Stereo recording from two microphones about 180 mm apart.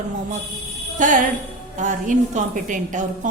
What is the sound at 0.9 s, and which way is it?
A woman's voice, 45° right (ahead or behind).